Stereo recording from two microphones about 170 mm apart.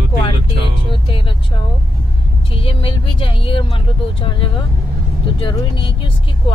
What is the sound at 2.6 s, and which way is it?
Speech, 30° left (ahead or behind).